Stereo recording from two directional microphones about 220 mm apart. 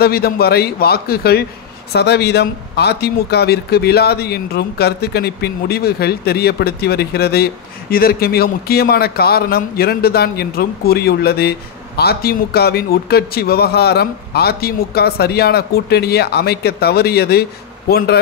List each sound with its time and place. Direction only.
0.0 s speech: 45° left (ahead or behind)